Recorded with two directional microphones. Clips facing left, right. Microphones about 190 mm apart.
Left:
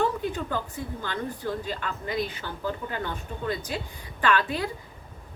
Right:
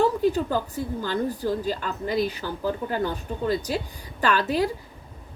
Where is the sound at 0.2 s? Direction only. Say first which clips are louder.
Right 7 dB; 35° right (ahead or behind).